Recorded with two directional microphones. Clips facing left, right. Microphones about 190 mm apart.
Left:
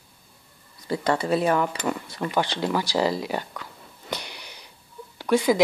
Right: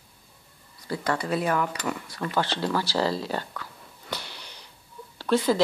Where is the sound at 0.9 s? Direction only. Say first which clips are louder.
Left 4 dB; 25° left (ahead or behind).